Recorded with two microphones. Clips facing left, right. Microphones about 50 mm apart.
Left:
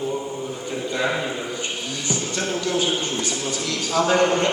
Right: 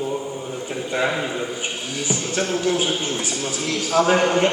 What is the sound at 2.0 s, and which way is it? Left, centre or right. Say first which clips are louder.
A man's voice: right 2 dB; centre.